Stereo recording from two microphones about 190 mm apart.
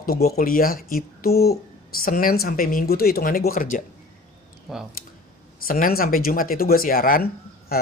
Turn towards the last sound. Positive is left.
turn(degrees=50)  # may be behind; listen again after turning